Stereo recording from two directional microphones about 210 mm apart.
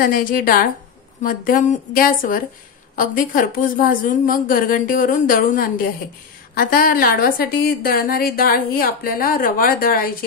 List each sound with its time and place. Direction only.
0.0 s a woman's voice: 40° left (ahead or behind)